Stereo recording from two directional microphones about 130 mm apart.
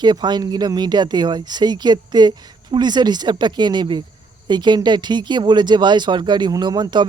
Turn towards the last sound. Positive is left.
turn(degrees=-35)  # may be behind; listen again after turning